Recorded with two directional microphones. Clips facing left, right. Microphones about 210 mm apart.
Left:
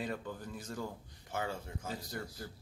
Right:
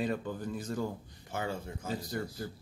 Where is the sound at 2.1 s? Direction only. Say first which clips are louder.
Right 7 dB; 25° right (ahead or behind).